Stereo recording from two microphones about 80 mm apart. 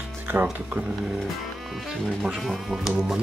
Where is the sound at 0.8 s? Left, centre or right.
Centre.